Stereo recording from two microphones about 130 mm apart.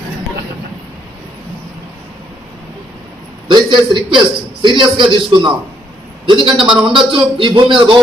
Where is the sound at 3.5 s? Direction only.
35° right (ahead or behind).